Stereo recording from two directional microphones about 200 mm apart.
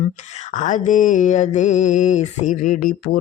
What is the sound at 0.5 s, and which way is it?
Mantra, 40° left (ahead or behind).